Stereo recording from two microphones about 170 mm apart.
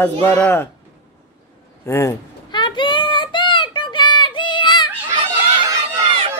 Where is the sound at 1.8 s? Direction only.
15° left (ahead or behind).